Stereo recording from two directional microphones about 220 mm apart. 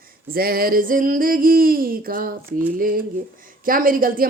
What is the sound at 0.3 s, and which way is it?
Speech, 40° right (ahead or behind).